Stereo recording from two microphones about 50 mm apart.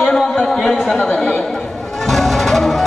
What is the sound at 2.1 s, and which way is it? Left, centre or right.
Music, centre.